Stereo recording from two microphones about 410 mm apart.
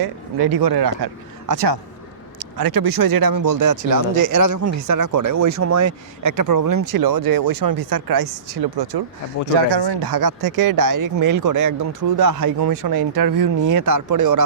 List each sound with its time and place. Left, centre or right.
0.0 s speech: right
9.6 s speech: right